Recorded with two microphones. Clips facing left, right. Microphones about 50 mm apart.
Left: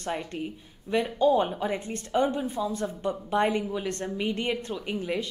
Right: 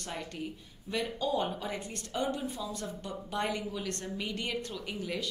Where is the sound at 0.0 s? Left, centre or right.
Left.